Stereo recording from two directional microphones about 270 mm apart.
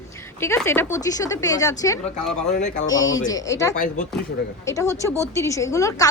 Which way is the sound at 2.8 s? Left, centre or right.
Centre.